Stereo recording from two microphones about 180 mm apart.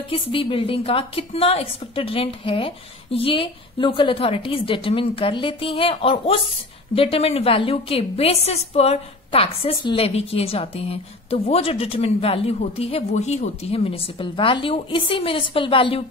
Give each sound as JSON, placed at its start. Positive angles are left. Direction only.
{"t": 0.1, "sound": "a woman's voice", "side_deg": 30}